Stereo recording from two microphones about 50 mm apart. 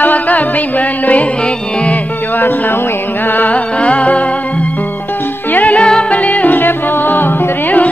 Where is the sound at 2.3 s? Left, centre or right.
Left.